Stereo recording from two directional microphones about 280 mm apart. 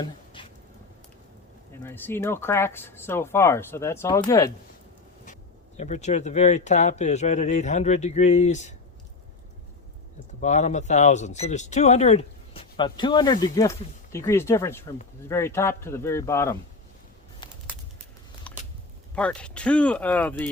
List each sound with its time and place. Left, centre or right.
0.4 s a sound: centre
1.7 s speech: centre
5.2 s speech: left
10.4 s speech: left; by 16.6 s centre
17.4 s bird: centre
18.5 s a sound: centre
19.1 s speech: centre